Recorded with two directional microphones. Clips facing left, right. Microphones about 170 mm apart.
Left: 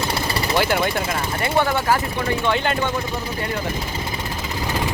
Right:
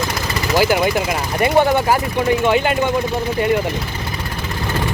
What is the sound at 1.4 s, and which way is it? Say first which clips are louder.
Speech: right 7 dB; 15° right (ahead or behind).